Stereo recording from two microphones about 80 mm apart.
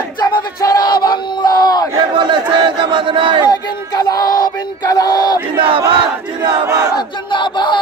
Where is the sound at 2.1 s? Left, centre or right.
Right.